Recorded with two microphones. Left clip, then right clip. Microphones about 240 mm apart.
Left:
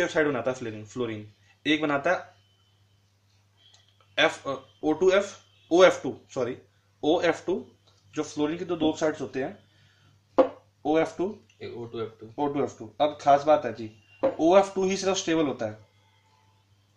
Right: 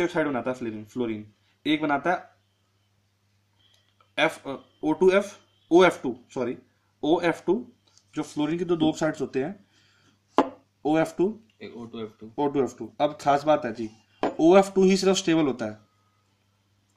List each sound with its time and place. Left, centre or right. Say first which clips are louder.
0.0 s speech: left 1 dB; right
4.1 s speech: left 1 dB; right
10.8 s speech: right 1 dB; right
12.4 s speech: right 3 dB; right